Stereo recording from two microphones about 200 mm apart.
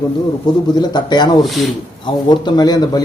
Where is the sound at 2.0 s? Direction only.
20° left (ahead or behind).